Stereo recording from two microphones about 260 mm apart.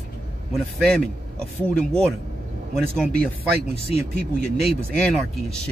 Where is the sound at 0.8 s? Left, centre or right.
Centre.